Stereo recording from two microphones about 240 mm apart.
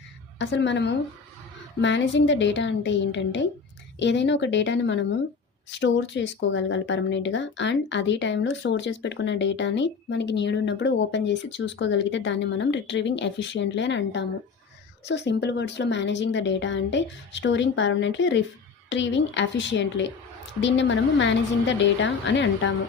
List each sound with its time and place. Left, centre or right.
0.3 s speech: left